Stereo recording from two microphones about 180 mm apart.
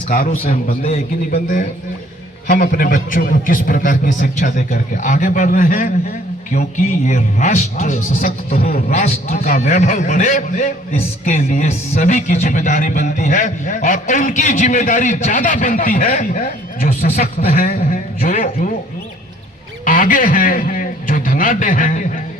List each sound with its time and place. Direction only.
0.1 s speech: 50° left (ahead or behind)
8.9 s a man's voice: 40° left (ahead or behind)
19.8 s speech: 50° left (ahead or behind)